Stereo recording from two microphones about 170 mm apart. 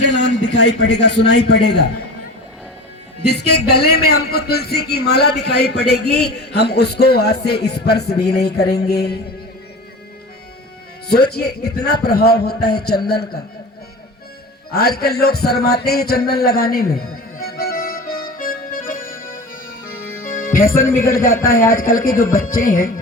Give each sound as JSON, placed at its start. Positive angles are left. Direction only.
{"t": 0.1, "sound": "a man's voice", "side_deg": 90}
{"t": 3.2, "sound": "a man's voice", "side_deg": 75}
{"t": 11.1, "sound": "a man's voice", "side_deg": 70}
{"t": 14.7, "sound": "music", "side_deg": 65}
{"t": 20.2, "sound": "speech", "side_deg": 55}
{"t": 21.4, "sound": "music", "side_deg": 55}